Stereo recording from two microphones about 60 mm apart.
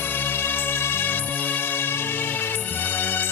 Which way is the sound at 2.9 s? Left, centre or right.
Left.